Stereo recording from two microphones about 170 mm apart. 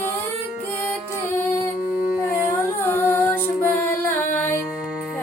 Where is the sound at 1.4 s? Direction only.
15° left (ahead or behind).